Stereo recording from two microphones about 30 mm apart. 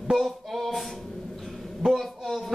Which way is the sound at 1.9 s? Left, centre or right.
Centre.